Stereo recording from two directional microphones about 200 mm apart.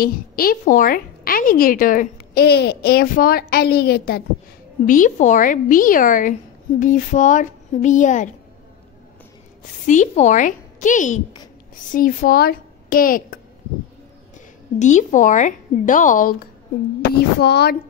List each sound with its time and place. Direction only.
0.0 s a woman's voice: 45° left (ahead or behind)
4.8 s speech: 40° left (ahead or behind)
9.8 s a woman's voice: 35° left (ahead or behind)
14.8 s speech: 35° left (ahead or behind)
17.4 s speech: 55° left (ahead or behind)